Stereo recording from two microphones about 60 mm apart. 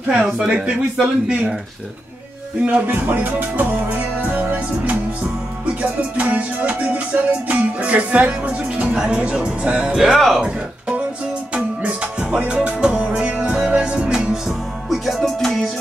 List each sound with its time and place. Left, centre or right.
0.4 s speech: centre
2.6 s music: right
9.9 s speech: centre
11.5 s music: right
14.9 s music: centre